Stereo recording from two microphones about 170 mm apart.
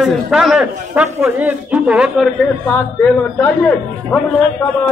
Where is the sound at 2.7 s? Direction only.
10° left (ahead or behind).